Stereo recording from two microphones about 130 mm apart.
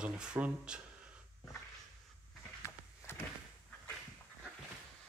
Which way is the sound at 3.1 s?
15° left (ahead or behind).